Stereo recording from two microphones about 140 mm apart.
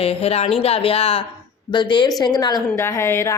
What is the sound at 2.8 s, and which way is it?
Speech, 20° left (ahead or behind).